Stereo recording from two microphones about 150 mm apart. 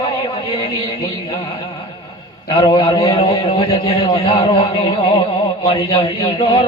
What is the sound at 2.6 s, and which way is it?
A man's voice, 30° left (ahead or behind).